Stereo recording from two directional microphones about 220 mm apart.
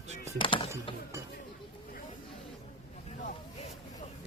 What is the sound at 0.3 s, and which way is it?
Speech, 25° left (ahead or behind).